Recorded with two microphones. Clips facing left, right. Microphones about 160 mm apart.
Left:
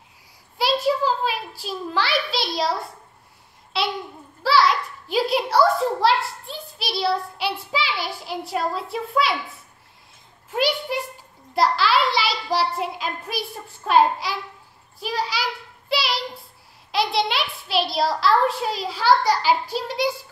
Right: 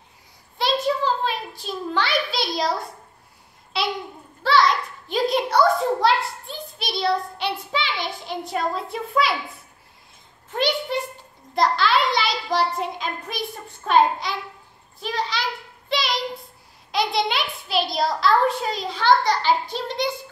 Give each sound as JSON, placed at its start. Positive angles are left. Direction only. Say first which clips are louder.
{"t": 0.6, "sound": "a sound", "louder": "left 1 dB", "side_deg": 5}
{"t": 3.8, "sound": "babbling", "louder": "left 1 dB", "side_deg": 0}
{"t": 4.4, "sound": "a child's voice", "louder": "even", "side_deg": 5}
{"t": 10.5, "sound": "a child's voice", "louder": "even", "side_deg": 10}
{"t": 15.9, "sound": "child singing", "louder": "even", "side_deg": 5}
{"t": 16.9, "sound": "a child's voice", "louder": "even", "side_deg": 0}